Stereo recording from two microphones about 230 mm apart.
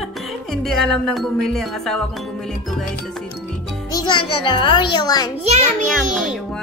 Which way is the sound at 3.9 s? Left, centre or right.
Centre.